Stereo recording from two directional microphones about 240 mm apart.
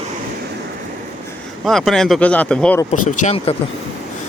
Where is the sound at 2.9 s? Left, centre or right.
Left.